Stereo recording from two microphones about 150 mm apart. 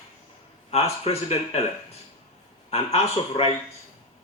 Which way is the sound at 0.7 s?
45° left (ahead or behind).